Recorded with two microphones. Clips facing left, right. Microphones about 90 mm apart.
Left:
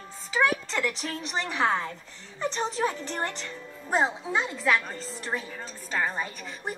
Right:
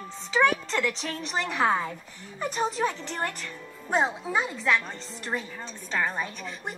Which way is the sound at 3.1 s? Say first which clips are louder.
Even; 25° left (ahead or behind).